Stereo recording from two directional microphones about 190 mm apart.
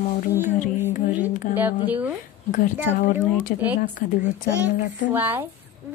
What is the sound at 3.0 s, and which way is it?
Speech, 40° left (ahead or behind).